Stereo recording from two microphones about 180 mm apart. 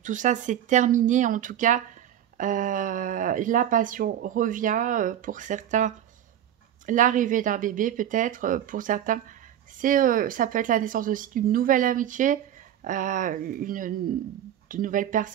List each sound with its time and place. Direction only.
0.0 s speech: 45° right (ahead or behind)